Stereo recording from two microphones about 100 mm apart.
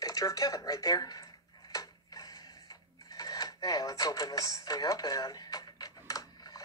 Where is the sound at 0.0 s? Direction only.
40° left (ahead or behind).